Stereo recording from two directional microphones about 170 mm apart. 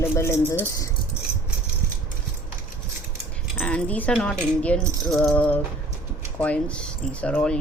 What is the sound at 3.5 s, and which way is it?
Speech, 10° left (ahead or behind).